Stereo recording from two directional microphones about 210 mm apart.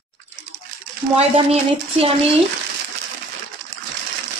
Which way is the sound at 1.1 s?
30° right (ahead or behind).